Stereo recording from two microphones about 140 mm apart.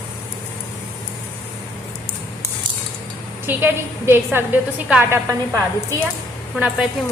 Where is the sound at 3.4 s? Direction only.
15° right (ahead or behind).